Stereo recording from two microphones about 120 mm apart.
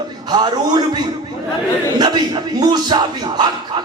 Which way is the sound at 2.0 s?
35° right (ahead or behind).